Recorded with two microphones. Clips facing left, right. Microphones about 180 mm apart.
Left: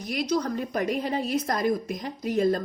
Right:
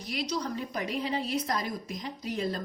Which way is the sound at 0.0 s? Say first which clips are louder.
Left 6 dB; 50° left (ahead or behind).